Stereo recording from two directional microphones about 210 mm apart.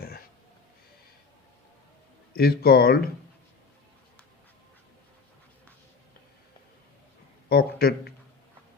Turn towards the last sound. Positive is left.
turn(degrees=45)  # may be behind; listen again after turning